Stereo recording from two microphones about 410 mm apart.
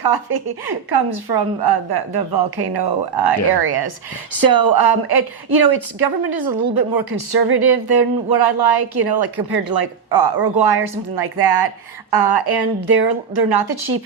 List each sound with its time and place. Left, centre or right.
0.0 s a woman's voice: right